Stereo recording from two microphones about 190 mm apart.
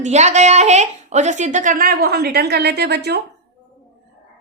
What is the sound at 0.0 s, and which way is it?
A woman's voice, 40° right (ahead or behind).